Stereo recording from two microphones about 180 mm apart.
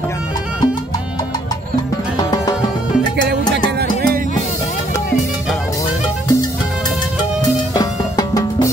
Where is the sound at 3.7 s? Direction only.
60° right (ahead or behind).